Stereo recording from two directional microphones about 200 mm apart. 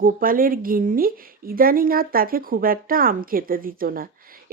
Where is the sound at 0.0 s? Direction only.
45° right (ahead or behind).